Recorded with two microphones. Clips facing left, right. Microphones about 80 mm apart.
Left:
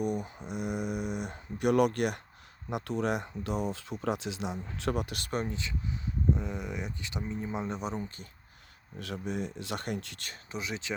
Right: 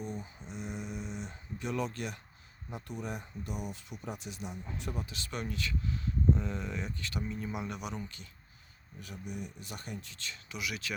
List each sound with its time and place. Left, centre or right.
0.0 s speech: left
2.6 s speech: left
5.5 s speech: left
9.0 s speech: left
10.5 s speech: left